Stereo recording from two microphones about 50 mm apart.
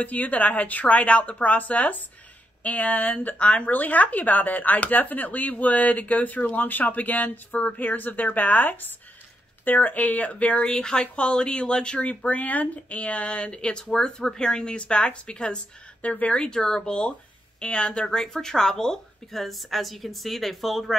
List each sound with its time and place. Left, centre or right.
0.0 s speech: left
10.7 s speech: centre
16.3 s speech: centre
18.0 s speech: centre